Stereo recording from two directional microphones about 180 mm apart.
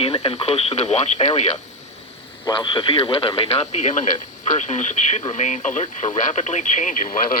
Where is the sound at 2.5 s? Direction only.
25° left (ahead or behind).